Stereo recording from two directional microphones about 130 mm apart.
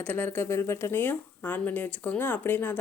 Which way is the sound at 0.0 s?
15° left (ahead or behind).